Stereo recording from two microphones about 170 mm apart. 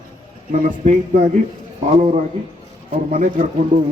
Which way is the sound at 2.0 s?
45° right (ahead or behind).